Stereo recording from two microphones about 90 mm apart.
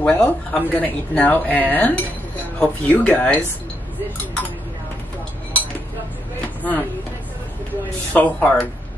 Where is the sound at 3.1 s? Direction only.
10° left (ahead or behind).